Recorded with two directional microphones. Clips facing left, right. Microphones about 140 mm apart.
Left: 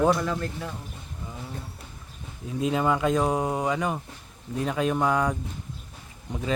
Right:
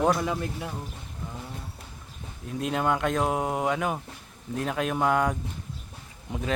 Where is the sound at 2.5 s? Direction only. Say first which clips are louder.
Left 2 dB; centre (ahead or behind).